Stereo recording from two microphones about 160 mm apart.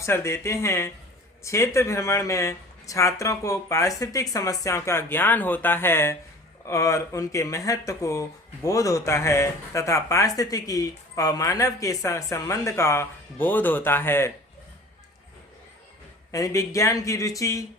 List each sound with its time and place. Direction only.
0.0 s speech: 15° left (ahead or behind)
16.3 s speech: 20° left (ahead or behind)